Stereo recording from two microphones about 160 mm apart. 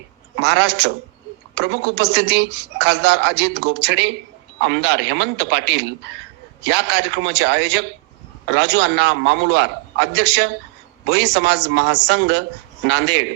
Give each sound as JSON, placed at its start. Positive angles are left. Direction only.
{"t": 0.3, "sound": "speech", "side_deg": -90}